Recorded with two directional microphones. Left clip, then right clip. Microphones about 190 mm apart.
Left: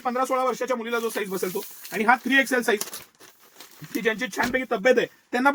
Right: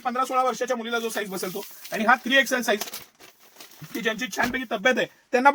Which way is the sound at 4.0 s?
30° right (ahead or behind).